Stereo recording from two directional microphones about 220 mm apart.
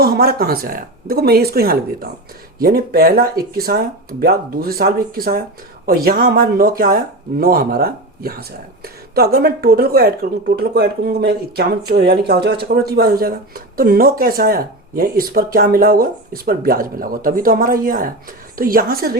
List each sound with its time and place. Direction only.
0.0 s speech: 45° right (ahead or behind)